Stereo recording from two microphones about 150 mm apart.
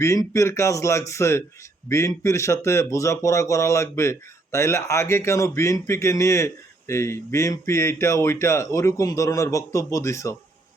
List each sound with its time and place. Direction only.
0.0 s speech: 20° left (ahead or behind)